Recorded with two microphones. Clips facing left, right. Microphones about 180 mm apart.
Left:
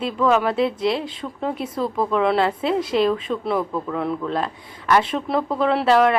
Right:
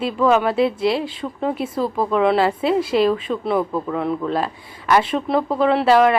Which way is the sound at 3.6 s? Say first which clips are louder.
Right 3 dB; 15° right (ahead or behind).